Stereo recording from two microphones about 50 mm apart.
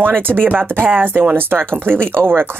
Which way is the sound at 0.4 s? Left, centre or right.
Right.